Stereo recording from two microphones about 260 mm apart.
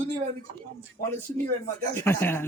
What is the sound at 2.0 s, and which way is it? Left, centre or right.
Speech, centre.